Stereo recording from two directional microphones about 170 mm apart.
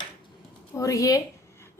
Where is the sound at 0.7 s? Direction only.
20° left (ahead or behind).